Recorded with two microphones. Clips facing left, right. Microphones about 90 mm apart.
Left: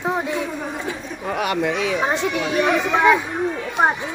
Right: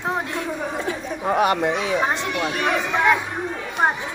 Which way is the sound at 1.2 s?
35° right (ahead or behind).